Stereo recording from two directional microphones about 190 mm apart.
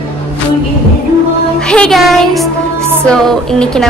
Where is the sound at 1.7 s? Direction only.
5° left (ahead or behind).